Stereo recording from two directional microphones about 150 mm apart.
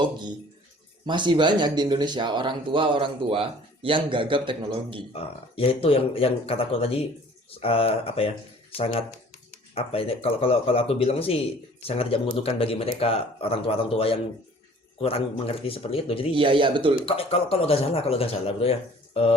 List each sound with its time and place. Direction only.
1.0 s speech: 30° right (ahead or behind)
5.1 s speech: 40° left (ahead or behind)
9.7 s speech: 40° left (ahead or behind)
16.3 s speech: 35° right (ahead or behind)
17.1 s speech: 40° left (ahead or behind)